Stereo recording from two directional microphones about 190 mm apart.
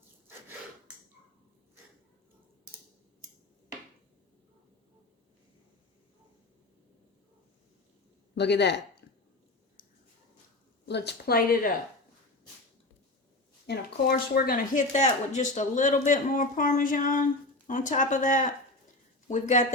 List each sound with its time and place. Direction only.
8.4 s speech: 60° left (ahead or behind)
10.8 s a woman's voice: 60° left (ahead or behind)
13.7 s speech: 55° left (ahead or behind)